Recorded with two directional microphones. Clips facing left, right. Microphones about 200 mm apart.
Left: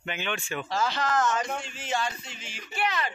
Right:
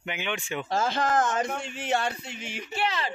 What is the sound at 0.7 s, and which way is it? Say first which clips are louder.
Speech: right 2 dB; 50° right (ahead or behind).